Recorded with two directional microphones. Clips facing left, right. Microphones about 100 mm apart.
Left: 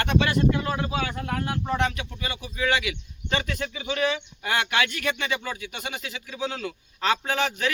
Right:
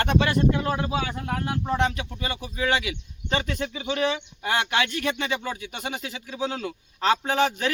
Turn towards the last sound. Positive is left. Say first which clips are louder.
# right 3 dB
turn(degrees=-30)  # may be behind; listen again after turning